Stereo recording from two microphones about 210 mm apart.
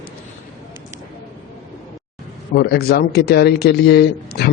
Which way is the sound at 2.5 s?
50° left (ahead or behind).